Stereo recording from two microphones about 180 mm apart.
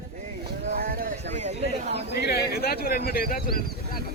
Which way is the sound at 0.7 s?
55° right (ahead or behind).